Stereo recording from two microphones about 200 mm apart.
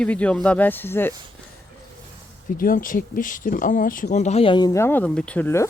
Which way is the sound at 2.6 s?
45° left (ahead or behind).